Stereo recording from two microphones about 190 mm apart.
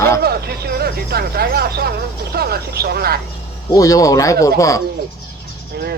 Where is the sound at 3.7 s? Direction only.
20° left (ahead or behind).